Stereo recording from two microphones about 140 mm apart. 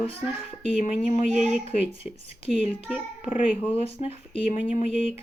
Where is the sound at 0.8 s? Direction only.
65° left (ahead or behind).